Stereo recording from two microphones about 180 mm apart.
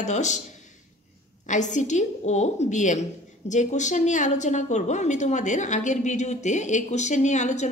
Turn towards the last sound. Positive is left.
turn(degrees=40)  # may be behind; listen again after turning